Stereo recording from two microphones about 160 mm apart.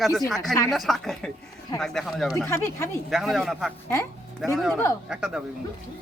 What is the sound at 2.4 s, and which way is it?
Speech, 15° left (ahead or behind).